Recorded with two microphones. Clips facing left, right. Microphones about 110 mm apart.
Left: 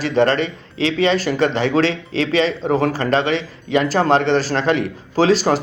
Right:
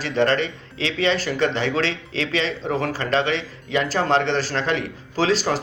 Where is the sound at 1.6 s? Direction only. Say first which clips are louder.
Left 6 dB; 40° left (ahead or behind).